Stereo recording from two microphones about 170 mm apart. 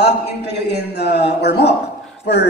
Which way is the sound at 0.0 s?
80° left.